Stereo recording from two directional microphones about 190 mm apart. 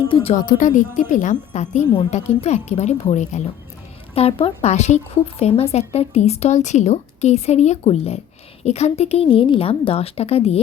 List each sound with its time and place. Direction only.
0.1 s speech: 30° left (ahead or behind)
0.3 s a woman's voice: 45° left (ahead or behind)